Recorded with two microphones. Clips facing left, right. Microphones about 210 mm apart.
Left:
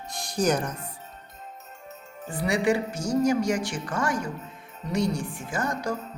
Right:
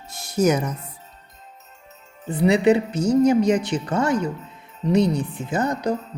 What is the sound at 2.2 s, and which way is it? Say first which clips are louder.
Speech: right 7 dB; 20° right (ahead or behind).